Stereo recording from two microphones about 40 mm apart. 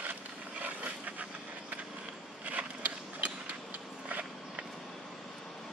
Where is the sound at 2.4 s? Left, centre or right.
Right.